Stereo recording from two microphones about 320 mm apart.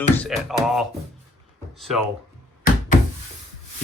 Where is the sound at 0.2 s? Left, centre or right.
Centre.